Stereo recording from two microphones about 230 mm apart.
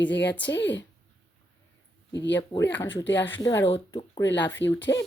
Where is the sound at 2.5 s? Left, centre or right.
Centre.